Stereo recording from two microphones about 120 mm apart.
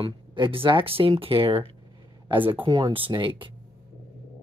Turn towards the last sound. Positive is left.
turn(degrees=-45)  # may be behind; listen again after turning